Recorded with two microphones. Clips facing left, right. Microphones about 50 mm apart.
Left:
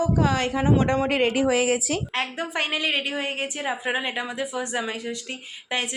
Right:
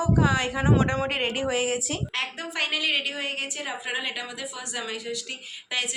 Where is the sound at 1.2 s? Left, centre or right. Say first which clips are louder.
Left 5 dB; left.